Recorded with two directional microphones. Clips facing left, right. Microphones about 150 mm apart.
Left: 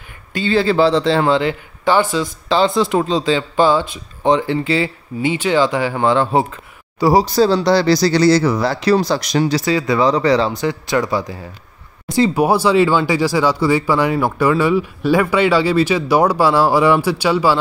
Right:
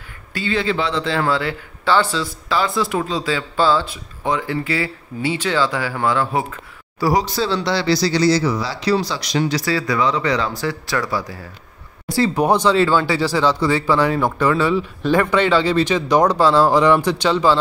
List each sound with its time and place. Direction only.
0.3 s speech: 30° left (ahead or behind)
2.4 s speech: 25° left (ahead or behind)
4.2 s speech: 30° left (ahead or behind)
7.3 s speech: 40° left (ahead or behind)
9.7 s speech: 20° left (ahead or behind)
9.9 s speech: 35° left (ahead or behind)
10.5 s speech: 20° left (ahead or behind)